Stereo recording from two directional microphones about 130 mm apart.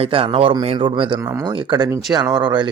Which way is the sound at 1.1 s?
25° right (ahead or behind).